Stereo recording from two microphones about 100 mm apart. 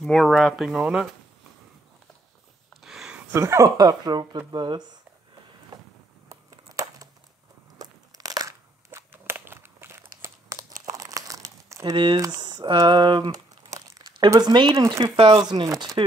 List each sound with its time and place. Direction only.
0.0 s speech: centre (ahead or behind)
0.7 s speech: 10° right (ahead or behind)
2.7 s a sound: 5° right (ahead or behind)
3.3 s speech: 30° right (ahead or behind); by 4.8 s 50° right (ahead or behind)
6.2 s a sound: 35° right (ahead or behind)
7.8 s crunch: 40° right (ahead or behind)
11.8 s speech: 50° right (ahead or behind)
12.2 s speech: 40° right (ahead or behind)
13.7 s crumpling: 40° right (ahead or behind)
14.3 s speech: 45° right (ahead or behind)
15.1 s speech: 65° right (ahead or behind)
15.5 s speech: 45° right (ahead or behind)